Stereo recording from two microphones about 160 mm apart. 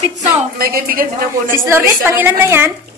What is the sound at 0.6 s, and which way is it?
Speech, 65° right (ahead or behind).